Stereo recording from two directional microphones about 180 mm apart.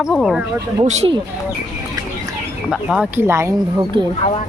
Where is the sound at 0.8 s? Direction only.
35° right (ahead or behind).